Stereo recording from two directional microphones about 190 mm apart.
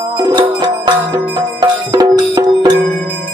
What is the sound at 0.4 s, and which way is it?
Music, 25° right (ahead or behind).